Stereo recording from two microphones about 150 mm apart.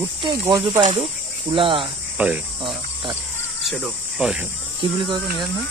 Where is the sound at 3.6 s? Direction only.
Centre (ahead or behind).